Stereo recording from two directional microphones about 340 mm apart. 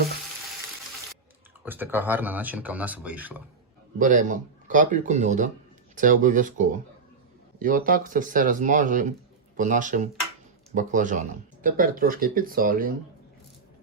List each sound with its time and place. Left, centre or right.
1.6 s speech: centre
3.9 s speech: right
7.6 s speech: right